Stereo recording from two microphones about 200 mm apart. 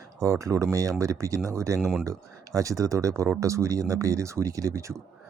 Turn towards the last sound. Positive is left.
turn(degrees=-15)  # may be behind; listen again after turning